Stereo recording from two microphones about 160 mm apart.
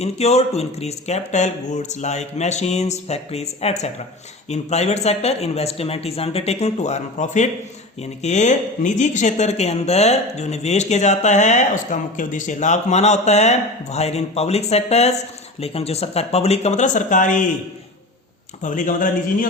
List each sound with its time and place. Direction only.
0.0 s speech: 40° left (ahead or behind)
18.6 s speech: 55° left (ahead or behind)